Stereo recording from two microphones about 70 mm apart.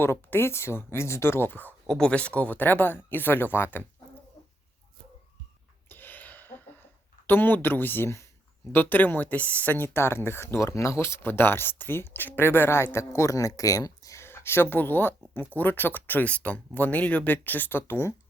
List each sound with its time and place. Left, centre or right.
0.0 s speech: left
1.9 s speech: centre; by 3.8 s left
5.9 s a sound: left
7.3 s speech: left
14.3 s speech: left